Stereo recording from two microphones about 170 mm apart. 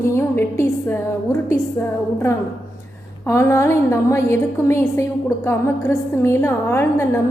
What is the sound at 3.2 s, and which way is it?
A woman's voice, 15° left (ahead or behind).